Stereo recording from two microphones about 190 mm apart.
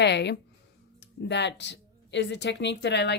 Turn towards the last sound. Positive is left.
turn(degrees=65)  # may be behind; listen again after turning